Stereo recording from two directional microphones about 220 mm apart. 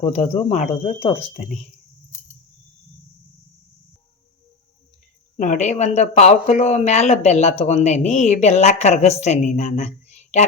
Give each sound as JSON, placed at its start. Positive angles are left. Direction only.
{"t": 0.0, "sound": "speech", "side_deg": 30}
{"t": 5.4, "sound": "speech", "side_deg": 35}